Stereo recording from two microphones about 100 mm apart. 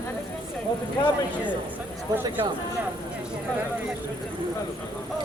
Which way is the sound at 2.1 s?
40° right (ahead or behind).